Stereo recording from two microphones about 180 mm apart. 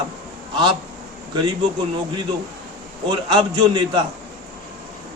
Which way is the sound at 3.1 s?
25° right (ahead or behind).